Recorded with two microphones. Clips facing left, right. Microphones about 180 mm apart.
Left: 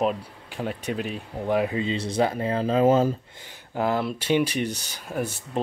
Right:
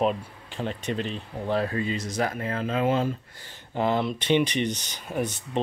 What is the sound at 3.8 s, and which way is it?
Speech, 5° left (ahead or behind).